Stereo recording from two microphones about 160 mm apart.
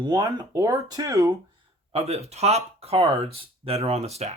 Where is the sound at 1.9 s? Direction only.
40° right (ahead or behind).